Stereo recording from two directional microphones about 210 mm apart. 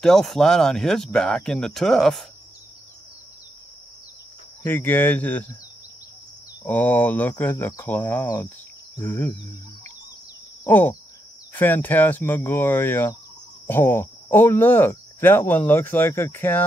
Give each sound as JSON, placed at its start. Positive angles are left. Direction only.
{"t": 0.0, "sound": "speech", "side_deg": 0}
{"t": 4.6, "sound": "speech", "side_deg": 10}
{"t": 6.6, "sound": "speech", "side_deg": 10}
{"t": 10.6, "sound": "a sound", "side_deg": 10}
{"t": 11.5, "sound": "speech", "side_deg": 10}